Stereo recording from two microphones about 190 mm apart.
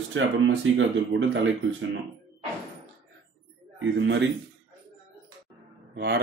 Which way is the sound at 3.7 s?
70° right (ahead or behind).